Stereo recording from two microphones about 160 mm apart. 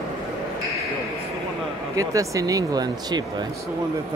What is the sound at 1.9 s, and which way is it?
Speech, 20° right (ahead or behind).